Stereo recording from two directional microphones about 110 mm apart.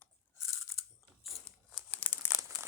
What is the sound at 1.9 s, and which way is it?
Crumpling, 15° left (ahead or behind).